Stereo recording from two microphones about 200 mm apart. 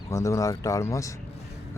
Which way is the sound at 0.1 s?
15° left (ahead or behind).